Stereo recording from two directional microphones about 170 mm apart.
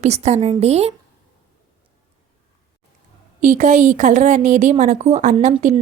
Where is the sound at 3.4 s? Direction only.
45° right (ahead or behind).